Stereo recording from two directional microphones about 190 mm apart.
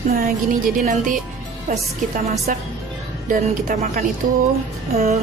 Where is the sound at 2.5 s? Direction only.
45° right (ahead or behind).